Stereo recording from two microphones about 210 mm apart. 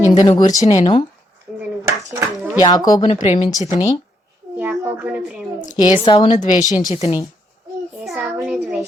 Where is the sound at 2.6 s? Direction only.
20° left (ahead or behind).